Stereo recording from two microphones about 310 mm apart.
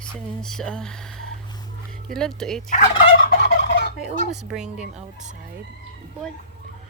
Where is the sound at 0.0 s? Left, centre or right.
Centre.